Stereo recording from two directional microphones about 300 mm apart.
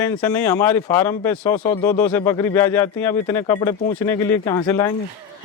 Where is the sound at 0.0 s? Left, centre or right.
Centre.